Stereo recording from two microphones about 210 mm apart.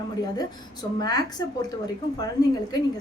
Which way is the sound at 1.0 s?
20° left (ahead or behind).